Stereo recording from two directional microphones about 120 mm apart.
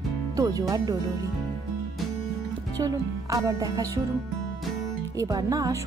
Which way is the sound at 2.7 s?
30° right (ahead or behind).